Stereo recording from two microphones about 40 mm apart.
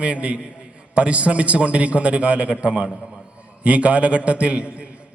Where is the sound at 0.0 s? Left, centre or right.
Right.